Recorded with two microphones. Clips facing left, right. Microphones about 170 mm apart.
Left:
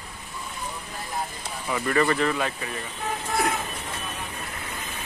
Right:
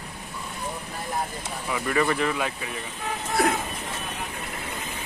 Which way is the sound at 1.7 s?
5° right (ahead or behind).